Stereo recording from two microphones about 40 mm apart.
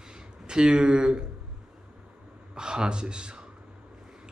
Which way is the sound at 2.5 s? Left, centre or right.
Centre.